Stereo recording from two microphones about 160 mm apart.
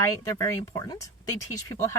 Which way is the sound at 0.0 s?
20° left (ahead or behind).